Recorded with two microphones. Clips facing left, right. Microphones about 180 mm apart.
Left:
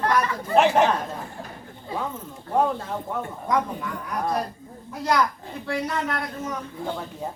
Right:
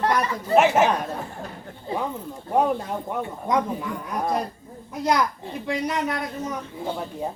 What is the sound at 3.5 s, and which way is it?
Speech, 20° right (ahead or behind).